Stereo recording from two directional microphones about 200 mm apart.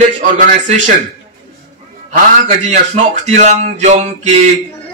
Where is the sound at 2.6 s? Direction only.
35° right (ahead or behind).